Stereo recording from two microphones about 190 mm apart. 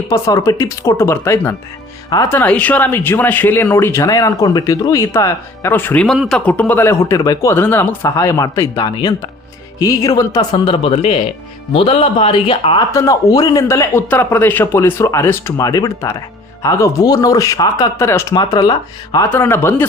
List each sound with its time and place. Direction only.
0.1 s speech: 20° left (ahead or behind)
12.9 s speech: 15° left (ahead or behind)